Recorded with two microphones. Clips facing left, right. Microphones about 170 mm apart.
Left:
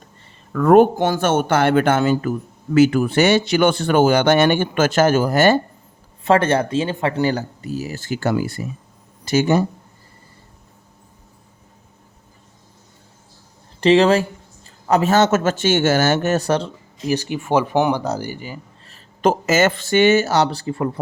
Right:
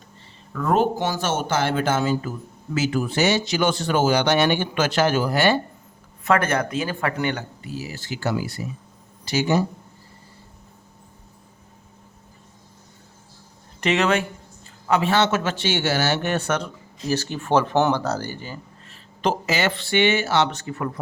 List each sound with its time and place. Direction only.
0.5 s speech: 55° left (ahead or behind)
6.2 s speech: 30° left (ahead or behind); by 9.6 s 50° left (ahead or behind)
13.8 s speech: 30° left (ahead or behind)
17.1 s speech: 15° left (ahead or behind)
18.9 s speech: 45° left (ahead or behind); by 21.0 s 30° left (ahead or behind)